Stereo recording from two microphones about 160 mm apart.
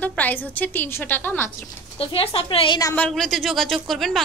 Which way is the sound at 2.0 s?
35° left (ahead or behind).